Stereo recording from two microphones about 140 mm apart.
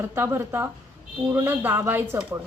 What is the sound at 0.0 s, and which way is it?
A woman's voice, 20° right (ahead or behind).